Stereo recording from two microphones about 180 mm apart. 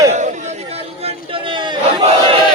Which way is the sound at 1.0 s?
25° right (ahead or behind).